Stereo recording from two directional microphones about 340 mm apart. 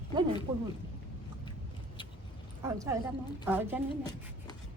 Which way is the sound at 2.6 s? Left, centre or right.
Centre.